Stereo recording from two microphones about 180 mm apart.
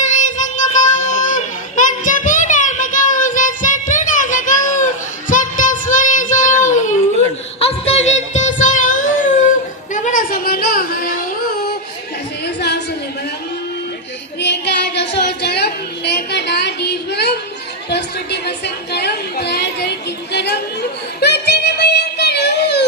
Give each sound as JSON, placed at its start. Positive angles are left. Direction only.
{"t": 0.0, "sound": "child singing", "side_deg": 45}
{"t": 7.6, "sound": "music", "side_deg": 35}
{"t": 9.9, "sound": "carnatic music", "side_deg": 45}
{"t": 12.5, "sound": "a sound", "side_deg": 70}
{"t": 14.3, "sound": "a sound", "side_deg": 70}
{"t": 21.2, "sound": "music", "side_deg": 65}